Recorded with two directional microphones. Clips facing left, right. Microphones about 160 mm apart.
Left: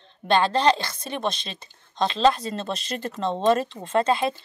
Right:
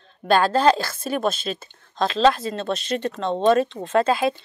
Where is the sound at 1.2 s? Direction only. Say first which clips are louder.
Right 5 dB; 5° right (ahead or behind).